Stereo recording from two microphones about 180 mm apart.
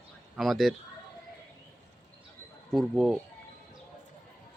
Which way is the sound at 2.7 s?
Centre (ahead or behind).